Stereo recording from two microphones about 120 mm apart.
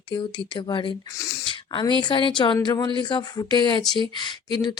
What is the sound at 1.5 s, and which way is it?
Speech, 45° left (ahead or behind).